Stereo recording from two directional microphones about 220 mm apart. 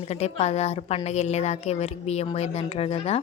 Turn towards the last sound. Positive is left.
turn(degrees=25)  # may be behind; listen again after turning